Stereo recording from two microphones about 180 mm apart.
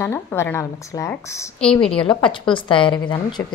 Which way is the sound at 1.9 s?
30° left (ahead or behind).